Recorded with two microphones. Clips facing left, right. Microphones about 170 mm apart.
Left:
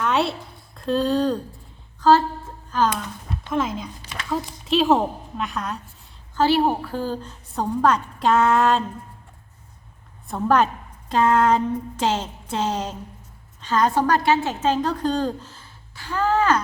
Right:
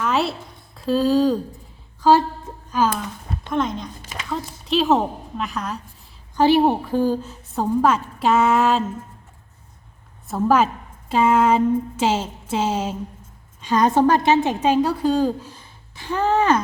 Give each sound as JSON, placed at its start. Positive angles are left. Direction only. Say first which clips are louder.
{"t": 0.0, "sound": "a sound", "louder": "even", "side_deg": 0}
{"t": 2.0, "sound": "a woman's voice", "louder": "right 1 dB", "side_deg": -15}
{"t": 3.5, "sound": "a woman's voice", "louder": "right 1 dB", "side_deg": 5}
{"t": 6.3, "sound": "a woman's voice", "louder": "right 3 dB", "side_deg": -20}
{"t": 10.2, "sound": "a woman's voice", "louder": "right 2 dB", "side_deg": -5}